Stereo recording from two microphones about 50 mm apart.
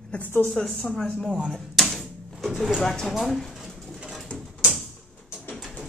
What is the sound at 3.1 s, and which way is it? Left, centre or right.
Speech, centre.